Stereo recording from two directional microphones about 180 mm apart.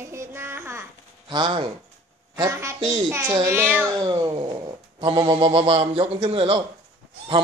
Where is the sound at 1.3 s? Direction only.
25° right (ahead or behind).